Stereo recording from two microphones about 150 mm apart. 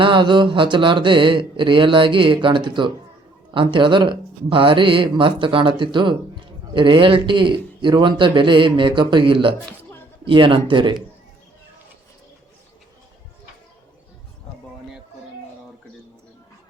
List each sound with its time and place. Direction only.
0.0 s speech: 35° right (ahead or behind)